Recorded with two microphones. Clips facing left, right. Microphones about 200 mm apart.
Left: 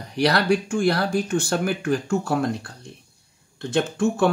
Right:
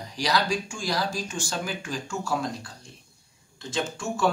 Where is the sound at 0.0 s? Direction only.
60° left (ahead or behind).